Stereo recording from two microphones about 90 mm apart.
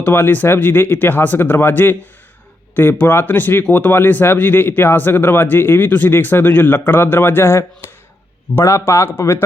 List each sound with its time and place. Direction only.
0.0 s a man's voice: 20° left (ahead or behind)